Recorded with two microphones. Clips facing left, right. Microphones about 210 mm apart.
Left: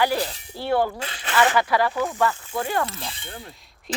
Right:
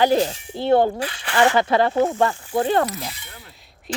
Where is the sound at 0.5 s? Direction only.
20° right (ahead or behind).